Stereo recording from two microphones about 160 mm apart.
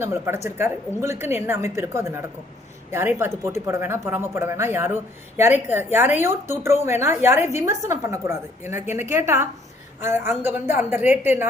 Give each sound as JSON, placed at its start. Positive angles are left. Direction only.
{"t": 0.0, "sound": "speech", "side_deg": -15}